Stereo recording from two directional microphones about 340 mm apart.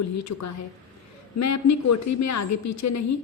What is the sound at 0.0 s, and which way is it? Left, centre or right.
A woman's voice, left.